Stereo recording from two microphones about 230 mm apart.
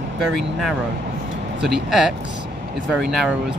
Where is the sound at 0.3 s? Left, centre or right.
Centre.